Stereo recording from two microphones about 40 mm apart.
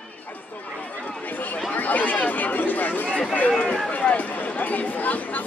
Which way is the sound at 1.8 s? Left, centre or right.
Left.